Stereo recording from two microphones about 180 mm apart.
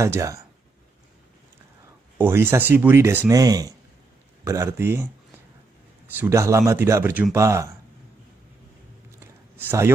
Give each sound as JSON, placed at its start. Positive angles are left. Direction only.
{"t": 0.0, "sound": "speech", "side_deg": -15}
{"t": 2.1, "sound": "speech", "side_deg": -15}
{"t": 6.1, "sound": "speech", "side_deg": -15}
{"t": 9.6, "sound": "speech", "side_deg": -10}